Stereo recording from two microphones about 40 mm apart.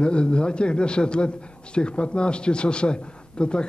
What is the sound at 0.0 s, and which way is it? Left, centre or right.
A man's voice, left.